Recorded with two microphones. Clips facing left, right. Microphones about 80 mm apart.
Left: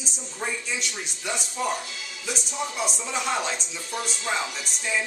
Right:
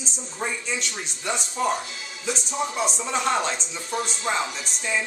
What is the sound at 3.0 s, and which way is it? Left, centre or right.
Speech, centre.